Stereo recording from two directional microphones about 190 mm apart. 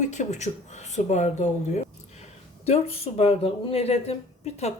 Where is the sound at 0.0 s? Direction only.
40° left (ahead or behind).